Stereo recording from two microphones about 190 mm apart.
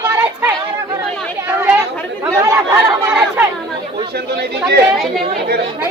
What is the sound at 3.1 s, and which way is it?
Chatter, 5° right (ahead or behind).